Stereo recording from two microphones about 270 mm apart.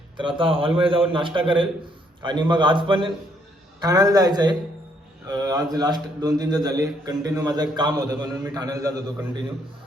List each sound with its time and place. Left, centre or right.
0.2 s a man's voice: centre